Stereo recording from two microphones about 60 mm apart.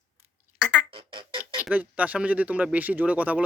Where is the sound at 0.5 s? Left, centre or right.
Centre.